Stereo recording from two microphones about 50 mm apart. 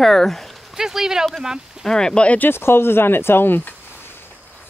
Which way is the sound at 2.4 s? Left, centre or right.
Left.